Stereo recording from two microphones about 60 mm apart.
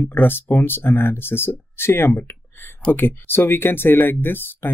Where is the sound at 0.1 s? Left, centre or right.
Left.